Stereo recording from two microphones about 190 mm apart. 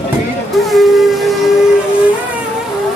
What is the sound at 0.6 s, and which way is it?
Steam whistle, centre (ahead or behind).